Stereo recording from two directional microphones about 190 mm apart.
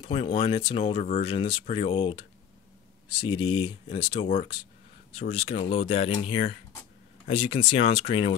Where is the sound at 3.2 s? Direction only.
25° left (ahead or behind).